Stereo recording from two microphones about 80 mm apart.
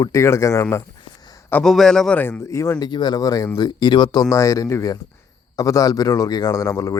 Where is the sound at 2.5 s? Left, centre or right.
Left.